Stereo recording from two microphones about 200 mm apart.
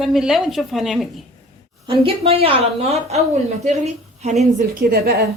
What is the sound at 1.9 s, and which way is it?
A woman's voice, 30° right (ahead or behind).